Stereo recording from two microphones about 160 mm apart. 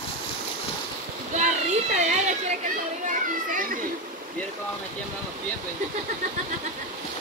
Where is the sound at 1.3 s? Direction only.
45° right (ahead or behind).